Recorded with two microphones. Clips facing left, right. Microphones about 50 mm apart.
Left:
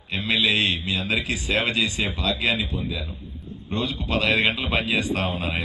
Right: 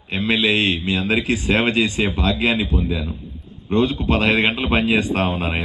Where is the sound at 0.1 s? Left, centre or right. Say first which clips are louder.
Right 4 dB; right.